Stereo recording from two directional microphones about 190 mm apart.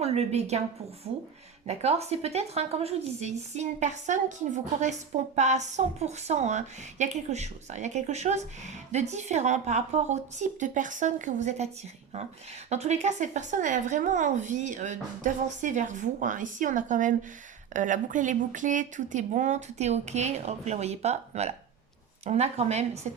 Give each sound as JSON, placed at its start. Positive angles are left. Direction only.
{"t": 0.0, "sound": "a woman's voice", "side_deg": -35}
{"t": 1.6, "sound": "a woman's voice", "side_deg": -35}
{"t": 12.7, "sound": "a woman's voice", "side_deg": -35}